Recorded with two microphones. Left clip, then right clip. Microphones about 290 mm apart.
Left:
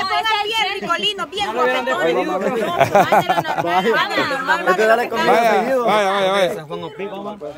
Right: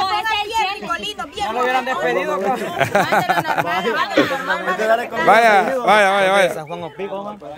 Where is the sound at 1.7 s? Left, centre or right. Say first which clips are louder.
Left 1 dB; centre.